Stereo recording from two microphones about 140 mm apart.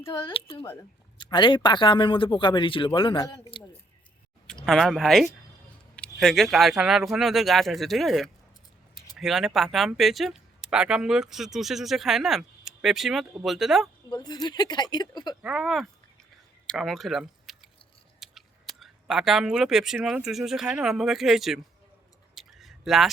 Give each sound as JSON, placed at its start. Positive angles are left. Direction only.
{"t": 0.1, "sound": "speech", "side_deg": 35}
{"t": 3.2, "sound": "speech", "side_deg": 25}
{"t": 4.6, "sound": "speech", "side_deg": 0}
{"t": 14.1, "sound": "speech", "side_deg": 30}
{"t": 15.4, "sound": "speech", "side_deg": -5}
{"t": 18.2, "sound": "a sound", "side_deg": 0}
{"t": 20.1, "sound": "speech", "side_deg": -5}
{"t": 22.4, "sound": "a sound", "side_deg": 0}